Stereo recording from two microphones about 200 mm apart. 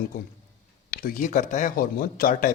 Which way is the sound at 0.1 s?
40° left (ahead or behind).